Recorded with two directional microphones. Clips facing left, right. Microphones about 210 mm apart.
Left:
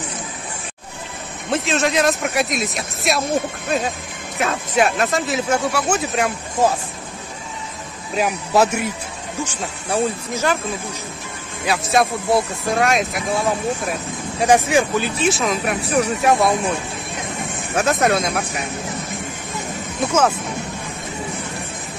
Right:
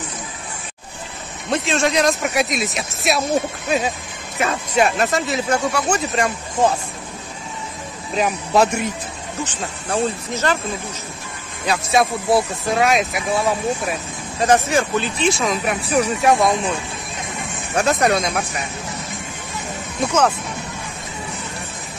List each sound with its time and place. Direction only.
1.5 s speech: centre (ahead or behind)
8.1 s speech: 5° left (ahead or behind)
11.6 s speech: centre (ahead or behind)
14.4 s speech: 15° left (ahead or behind)
17.7 s speech: 5° left (ahead or behind)
20.1 s speech: 5° left (ahead or behind)